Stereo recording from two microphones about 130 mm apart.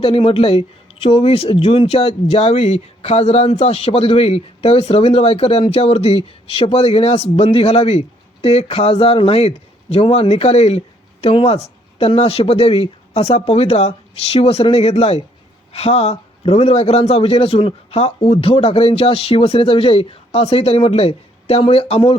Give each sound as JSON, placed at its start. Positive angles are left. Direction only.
{"t": 0.0, "sound": "a man's voice", "side_deg": 45}